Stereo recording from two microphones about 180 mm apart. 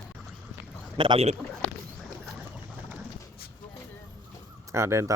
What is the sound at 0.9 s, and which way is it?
Speech, 30° right (ahead or behind).